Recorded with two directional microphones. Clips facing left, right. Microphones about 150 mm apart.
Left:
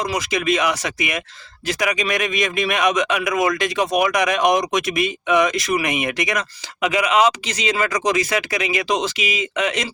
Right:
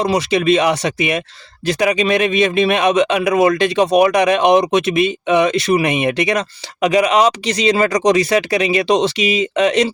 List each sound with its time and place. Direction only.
0.0 s a man's voice: 30° right (ahead or behind)